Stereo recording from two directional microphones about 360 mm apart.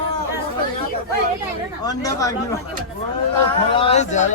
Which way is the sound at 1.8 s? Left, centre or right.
Centre.